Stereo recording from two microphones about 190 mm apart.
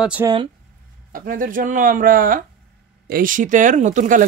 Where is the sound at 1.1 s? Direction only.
45° right (ahead or behind).